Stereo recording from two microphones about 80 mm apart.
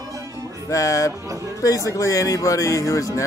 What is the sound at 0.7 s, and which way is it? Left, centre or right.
Music, left.